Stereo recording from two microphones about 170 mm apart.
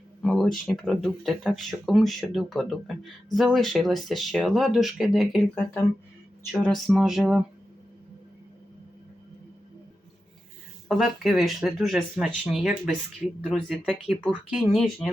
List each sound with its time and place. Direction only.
0.3 s speech: 5° left (ahead or behind)
10.8 s speech: centre (ahead or behind)